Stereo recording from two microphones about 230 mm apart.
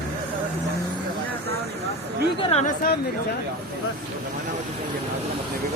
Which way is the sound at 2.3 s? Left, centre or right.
Left.